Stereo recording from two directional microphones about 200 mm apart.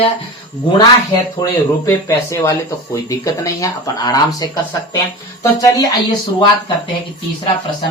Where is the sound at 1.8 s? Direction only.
15° left (ahead or behind).